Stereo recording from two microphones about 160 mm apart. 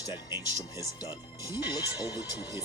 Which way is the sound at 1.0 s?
25° left (ahead or behind).